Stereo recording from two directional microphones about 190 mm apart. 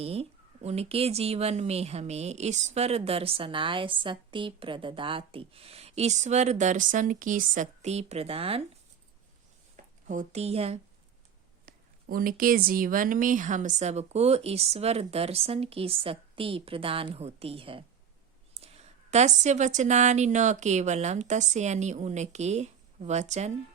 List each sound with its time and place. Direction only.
0.0 s speech: 30° right (ahead or behind)
9.7 s speech: 40° right (ahead or behind)
11.6 s speech: 50° right (ahead or behind)